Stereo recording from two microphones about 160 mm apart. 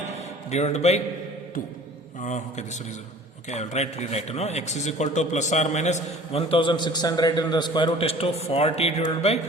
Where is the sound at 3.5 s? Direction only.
45° left (ahead or behind).